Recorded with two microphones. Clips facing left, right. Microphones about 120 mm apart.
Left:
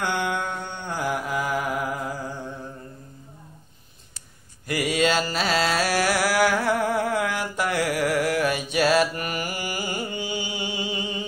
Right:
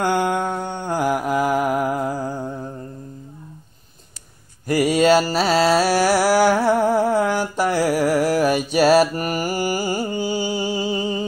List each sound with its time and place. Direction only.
0.0 s mantra: 45° right (ahead or behind)
1.0 s music: 45° right (ahead or behind)
4.6 s mantra: 45° right (ahead or behind)